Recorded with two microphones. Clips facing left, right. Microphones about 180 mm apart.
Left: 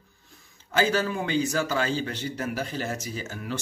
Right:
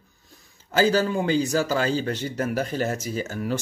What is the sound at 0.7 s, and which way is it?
A man's voice, 35° right (ahead or behind).